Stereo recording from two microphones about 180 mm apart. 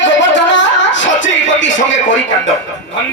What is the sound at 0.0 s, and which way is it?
Music, 90° left.